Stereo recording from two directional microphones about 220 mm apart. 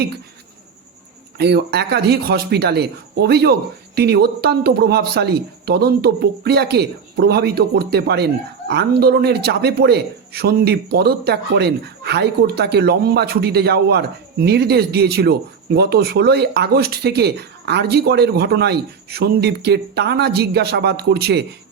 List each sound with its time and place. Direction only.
1.4 s speech: 50° right (ahead or behind)